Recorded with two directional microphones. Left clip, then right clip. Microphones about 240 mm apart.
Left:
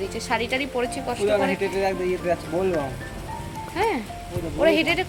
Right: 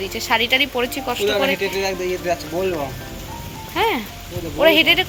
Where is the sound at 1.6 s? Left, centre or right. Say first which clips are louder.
Right 2 dB; left.